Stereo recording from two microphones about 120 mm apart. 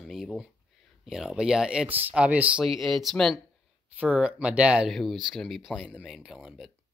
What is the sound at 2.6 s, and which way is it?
Speech, centre (ahead or behind).